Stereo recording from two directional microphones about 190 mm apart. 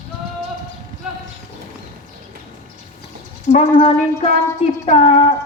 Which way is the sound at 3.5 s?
40° left (ahead or behind).